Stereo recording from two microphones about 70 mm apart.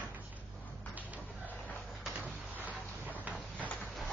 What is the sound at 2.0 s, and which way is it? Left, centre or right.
Vehicle, centre.